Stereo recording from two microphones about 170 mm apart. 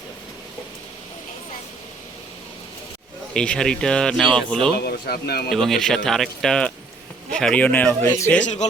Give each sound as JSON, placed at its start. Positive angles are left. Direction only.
{"t": 3.3, "sound": "speech", "side_deg": 5}
{"t": 4.8, "sound": "speech", "side_deg": 65}
{"t": 5.5, "sound": "speech", "side_deg": 0}
{"t": 8.4, "sound": "speech", "side_deg": 45}